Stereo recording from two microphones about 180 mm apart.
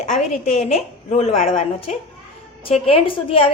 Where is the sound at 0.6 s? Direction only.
35° left (ahead or behind).